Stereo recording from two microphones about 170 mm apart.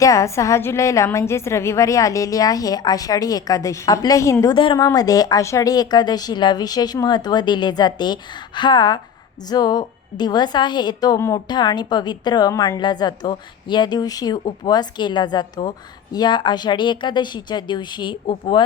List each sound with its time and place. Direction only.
0.0 s a woman's voice: 20° left (ahead or behind)
4.5 s a woman's voice: 30° left (ahead or behind)